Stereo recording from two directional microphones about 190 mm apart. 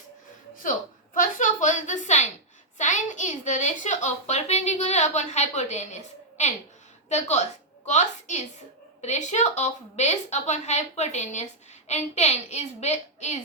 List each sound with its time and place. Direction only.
1.1 s a woman's voice: 45° left (ahead or behind)